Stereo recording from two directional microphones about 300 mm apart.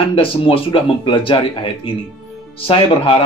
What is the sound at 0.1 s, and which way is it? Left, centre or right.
Speech, centre.